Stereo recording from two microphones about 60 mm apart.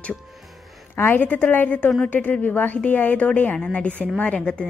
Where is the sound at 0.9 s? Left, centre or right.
Left.